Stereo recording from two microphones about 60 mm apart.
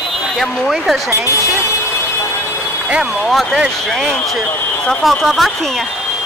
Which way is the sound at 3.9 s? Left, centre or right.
Centre.